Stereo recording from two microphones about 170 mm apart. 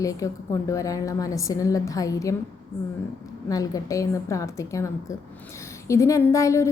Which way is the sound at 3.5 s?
20° left (ahead or behind).